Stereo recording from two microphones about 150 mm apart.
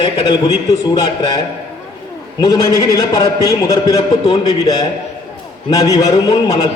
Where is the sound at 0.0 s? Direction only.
30° left (ahead or behind).